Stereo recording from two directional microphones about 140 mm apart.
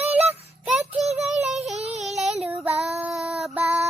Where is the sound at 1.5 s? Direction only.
Centre (ahead or behind).